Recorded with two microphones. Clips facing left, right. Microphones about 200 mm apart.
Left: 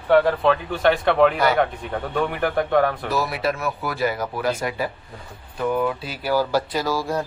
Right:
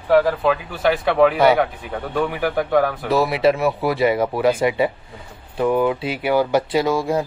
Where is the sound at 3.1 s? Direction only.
25° right (ahead or behind).